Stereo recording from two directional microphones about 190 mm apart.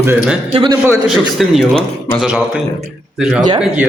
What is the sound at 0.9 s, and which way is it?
A man's voice, 5° right (ahead or behind).